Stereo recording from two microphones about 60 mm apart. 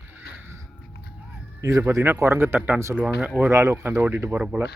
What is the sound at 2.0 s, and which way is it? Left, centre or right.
Speech, right.